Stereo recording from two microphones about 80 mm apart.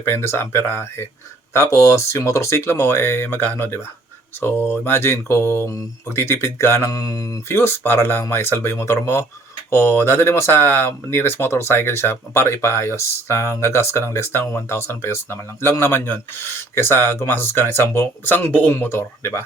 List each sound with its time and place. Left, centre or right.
0.0 s speech: left
6.9 s mantra: left
7.4 s speech: left
18.7 s speech: left